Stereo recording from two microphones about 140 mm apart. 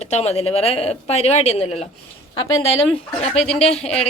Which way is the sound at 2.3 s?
25° left (ahead or behind).